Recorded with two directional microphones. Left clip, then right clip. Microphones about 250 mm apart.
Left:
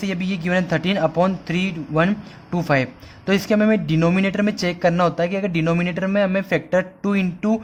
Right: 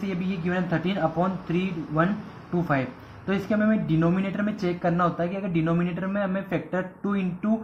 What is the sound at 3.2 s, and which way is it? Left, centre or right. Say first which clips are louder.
Speech: left 7 dB; left.